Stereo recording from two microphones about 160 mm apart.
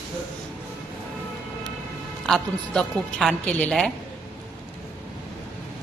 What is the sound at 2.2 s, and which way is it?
Speech, 5° left (ahead or behind).